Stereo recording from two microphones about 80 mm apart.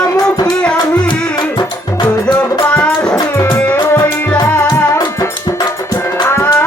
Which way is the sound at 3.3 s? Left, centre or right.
Left.